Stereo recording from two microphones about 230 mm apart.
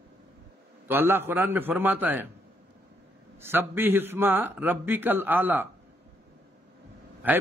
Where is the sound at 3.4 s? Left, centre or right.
Centre.